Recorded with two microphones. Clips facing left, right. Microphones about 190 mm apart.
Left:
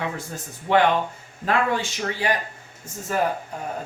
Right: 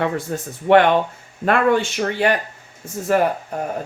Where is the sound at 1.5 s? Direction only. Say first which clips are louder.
Right 6 dB; 60° right (ahead or behind).